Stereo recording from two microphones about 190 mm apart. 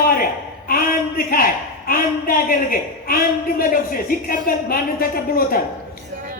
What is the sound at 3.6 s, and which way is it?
Speech, 50° left (ahead or behind).